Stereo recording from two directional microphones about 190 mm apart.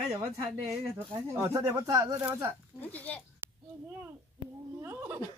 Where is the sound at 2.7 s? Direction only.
10° left (ahead or behind).